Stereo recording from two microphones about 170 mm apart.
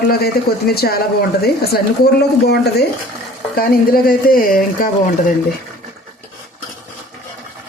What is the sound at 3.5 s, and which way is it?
Speech, 60° left (ahead or behind).